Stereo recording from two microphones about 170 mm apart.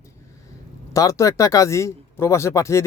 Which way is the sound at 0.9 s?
20° left (ahead or behind).